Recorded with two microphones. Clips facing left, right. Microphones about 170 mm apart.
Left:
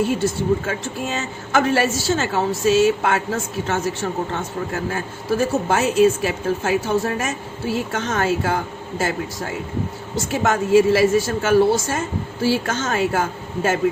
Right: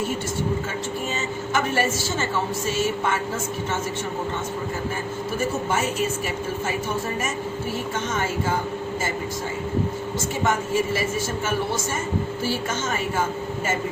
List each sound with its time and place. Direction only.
1.0 s a woman's voice: 80° left
4.7 s a woman's voice: 75° left (ahead or behind)
5.6 s a woman's voice: 90° left; by 8.5 s 75° left (ahead or behind)
10.3 s a woman's voice: 90° left